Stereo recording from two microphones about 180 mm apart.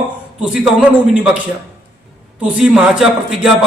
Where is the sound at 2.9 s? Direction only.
5° right (ahead or behind).